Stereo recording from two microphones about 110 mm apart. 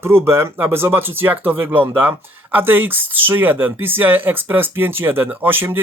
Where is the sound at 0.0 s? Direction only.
25° right (ahead or behind).